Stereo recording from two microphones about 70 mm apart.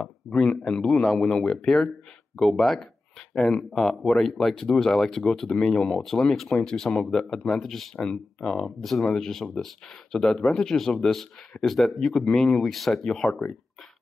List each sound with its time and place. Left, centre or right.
0.0 s speech: centre